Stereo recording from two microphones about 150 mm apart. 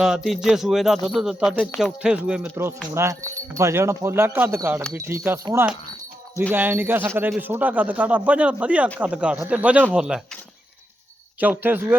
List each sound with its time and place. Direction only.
0.0 s a man's voice: 5° right (ahead or behind)
2.9 s a man's voice: 20° right (ahead or behind)
6.5 s a man's voice: 15° right (ahead or behind)
11.3 s a man's voice: 10° right (ahead or behind)